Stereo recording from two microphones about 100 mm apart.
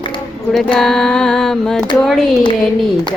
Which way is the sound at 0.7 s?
5° left (ahead or behind).